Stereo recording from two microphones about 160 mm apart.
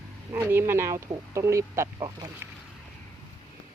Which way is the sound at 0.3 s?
15° right (ahead or behind).